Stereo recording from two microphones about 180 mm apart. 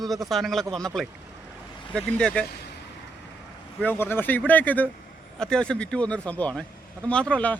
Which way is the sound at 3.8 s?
10° left (ahead or behind).